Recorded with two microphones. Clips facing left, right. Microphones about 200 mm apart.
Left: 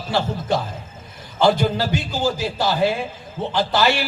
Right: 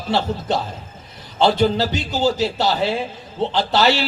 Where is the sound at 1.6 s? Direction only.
25° right (ahead or behind).